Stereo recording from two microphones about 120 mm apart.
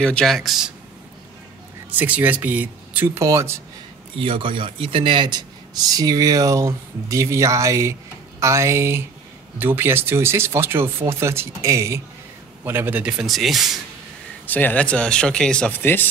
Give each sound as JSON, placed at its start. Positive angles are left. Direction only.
{"t": 0.0, "sound": "speech", "side_deg": 5}
{"t": 1.9, "sound": "speech", "side_deg": -10}
{"t": 3.2, "sound": "speech", "side_deg": -25}
{"t": 4.2, "sound": "a man's voice", "side_deg": -45}
{"t": 14.4, "sound": "speech", "side_deg": 15}
{"t": 15.8, "sound": "speech", "side_deg": 15}